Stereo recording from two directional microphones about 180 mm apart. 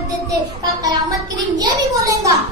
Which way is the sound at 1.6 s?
20° right (ahead or behind).